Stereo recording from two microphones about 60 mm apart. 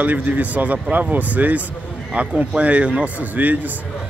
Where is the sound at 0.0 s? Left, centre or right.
Right.